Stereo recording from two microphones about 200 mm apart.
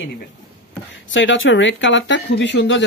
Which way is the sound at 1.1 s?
70° left (ahead or behind).